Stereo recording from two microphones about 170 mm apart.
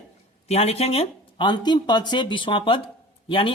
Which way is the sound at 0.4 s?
35° left (ahead or behind).